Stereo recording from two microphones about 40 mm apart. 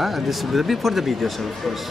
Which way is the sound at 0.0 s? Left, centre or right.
Centre.